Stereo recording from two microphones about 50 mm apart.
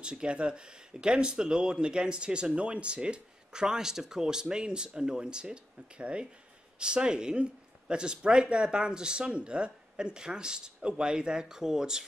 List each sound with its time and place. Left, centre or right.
0.0 s speech: centre